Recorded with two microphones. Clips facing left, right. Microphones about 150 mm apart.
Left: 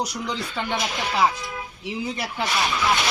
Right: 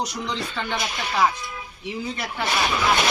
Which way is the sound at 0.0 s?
10° left (ahead or behind).